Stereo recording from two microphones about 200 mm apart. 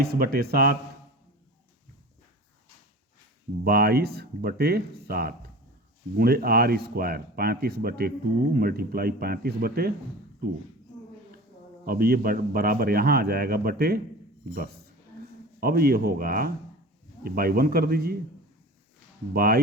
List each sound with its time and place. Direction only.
0.0 s speech: 50° right (ahead or behind)
3.6 s speech: 50° right (ahead or behind)
11.9 s speech: 50° right (ahead or behind)
19.3 s speech: 50° right (ahead or behind)